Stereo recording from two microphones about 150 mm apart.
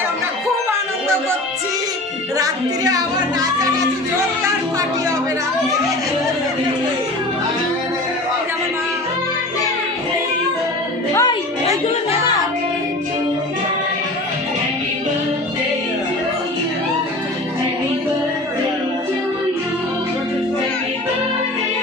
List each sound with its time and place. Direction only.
2.4 s music: 25° right (ahead or behind)
11.1 s music: 20° left (ahead or behind)